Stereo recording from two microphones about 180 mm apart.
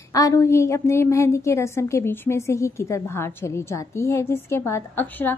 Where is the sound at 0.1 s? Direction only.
20° left (ahead or behind).